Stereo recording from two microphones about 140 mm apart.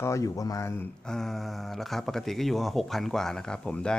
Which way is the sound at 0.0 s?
20° left (ahead or behind).